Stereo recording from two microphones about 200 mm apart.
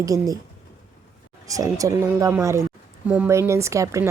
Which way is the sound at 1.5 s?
15° right (ahead or behind).